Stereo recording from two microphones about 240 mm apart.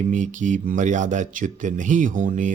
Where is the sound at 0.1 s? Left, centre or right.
Right.